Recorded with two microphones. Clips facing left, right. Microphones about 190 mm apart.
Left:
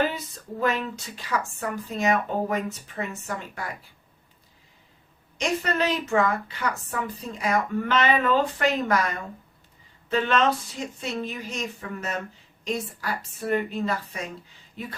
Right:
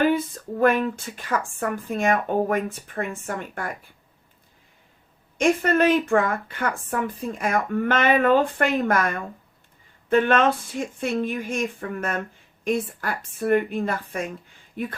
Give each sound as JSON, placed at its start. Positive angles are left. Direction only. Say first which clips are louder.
{"t": 0.6, "sound": "a woman's voice", "louder": "right 6 dB", "side_deg": -55}
{"t": 5.4, "sound": "a woman's voice", "louder": "right 6 dB", "side_deg": -55}
{"t": 14.8, "sound": "a sound", "louder": "right 7 dB", "side_deg": -55}